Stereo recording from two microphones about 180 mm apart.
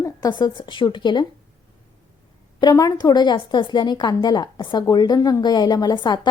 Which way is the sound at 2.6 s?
20° left (ahead or behind).